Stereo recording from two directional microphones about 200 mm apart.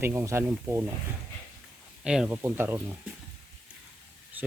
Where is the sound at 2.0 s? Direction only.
5° right (ahead or behind).